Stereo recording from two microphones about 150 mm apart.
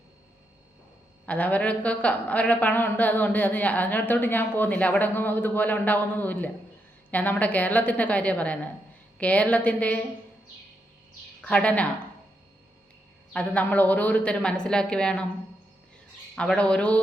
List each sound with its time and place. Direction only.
1.2 s speech: 10° left (ahead or behind)
11.4 s speech: 10° left (ahead or behind)
13.3 s speech: 10° left (ahead or behind)
16.3 s speech: 5° left (ahead or behind)